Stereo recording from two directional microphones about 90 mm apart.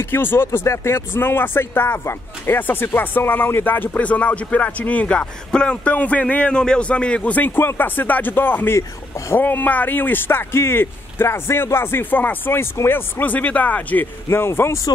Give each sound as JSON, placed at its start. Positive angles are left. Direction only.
{"t": 0.0, "sound": "speech", "side_deg": 25}